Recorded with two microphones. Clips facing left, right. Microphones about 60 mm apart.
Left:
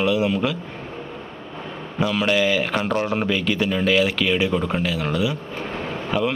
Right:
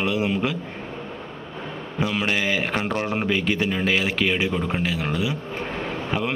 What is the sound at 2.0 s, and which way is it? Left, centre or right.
A man's voice, right.